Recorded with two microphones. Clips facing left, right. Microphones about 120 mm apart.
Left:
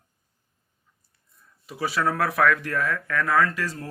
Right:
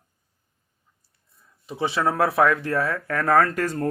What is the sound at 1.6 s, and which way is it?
Speech, 25° right (ahead or behind).